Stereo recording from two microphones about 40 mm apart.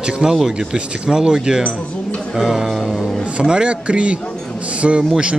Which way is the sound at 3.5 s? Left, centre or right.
Right.